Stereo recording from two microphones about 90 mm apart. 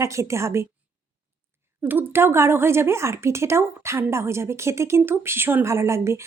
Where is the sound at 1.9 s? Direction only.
25° right (ahead or behind).